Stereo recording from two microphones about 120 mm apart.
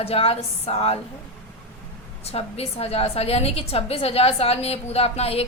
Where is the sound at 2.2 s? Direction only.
60° left (ahead or behind).